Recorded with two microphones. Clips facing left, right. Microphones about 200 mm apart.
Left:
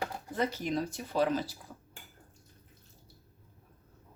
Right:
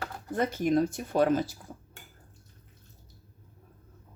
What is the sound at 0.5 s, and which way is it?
Speech, 50° right (ahead or behind).